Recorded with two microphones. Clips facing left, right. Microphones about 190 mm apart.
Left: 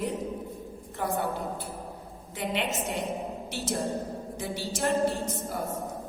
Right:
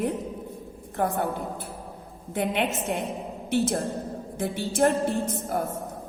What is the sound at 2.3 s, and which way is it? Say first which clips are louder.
Speech: right 4 dB; 55° right (ahead or behind).